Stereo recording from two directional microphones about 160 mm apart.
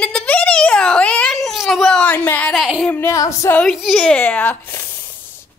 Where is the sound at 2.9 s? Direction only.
15° left (ahead or behind).